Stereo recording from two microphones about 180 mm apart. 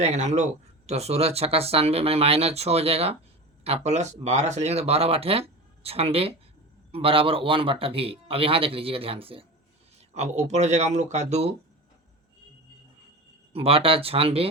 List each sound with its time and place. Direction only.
0.0 s speech: 40° right (ahead or behind)
13.5 s speech: 30° right (ahead or behind)